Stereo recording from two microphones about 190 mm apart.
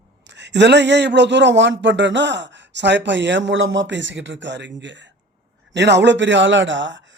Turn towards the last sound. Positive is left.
turn(degrees=-75)  # may be behind; listen again after turning